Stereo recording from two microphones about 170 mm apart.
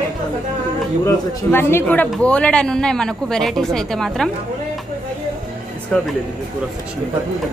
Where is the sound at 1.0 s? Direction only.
15° left (ahead or behind).